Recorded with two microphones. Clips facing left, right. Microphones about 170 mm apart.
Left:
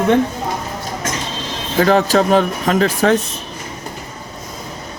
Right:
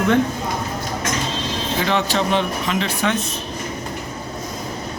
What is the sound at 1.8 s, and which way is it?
A man's voice, 40° left (ahead or behind).